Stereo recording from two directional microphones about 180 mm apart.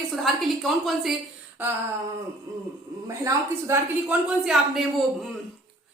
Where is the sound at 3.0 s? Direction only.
15° right (ahead or behind).